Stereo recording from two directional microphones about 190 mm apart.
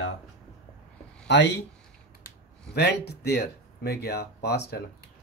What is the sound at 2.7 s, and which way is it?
Speech, 60° left (ahead or behind).